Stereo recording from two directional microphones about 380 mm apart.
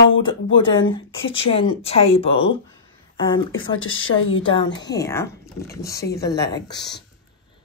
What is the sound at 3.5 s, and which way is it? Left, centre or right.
Speech, left.